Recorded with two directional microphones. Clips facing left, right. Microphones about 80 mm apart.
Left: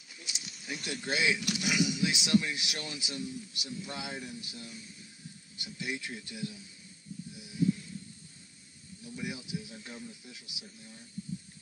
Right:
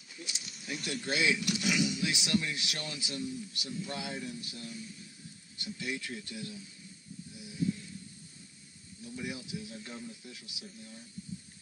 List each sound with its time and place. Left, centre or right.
0.1 s bird: left
0.9 s speech: left
7.3 s a sound: left
9.0 s speech: left